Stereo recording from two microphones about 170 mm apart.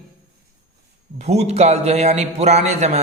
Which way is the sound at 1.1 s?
40° right (ahead or behind).